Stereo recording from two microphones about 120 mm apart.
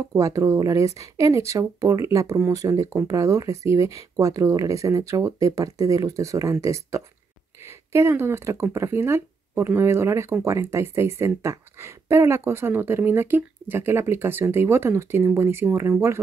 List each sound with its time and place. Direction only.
0.0 s speech: 25° right (ahead or behind)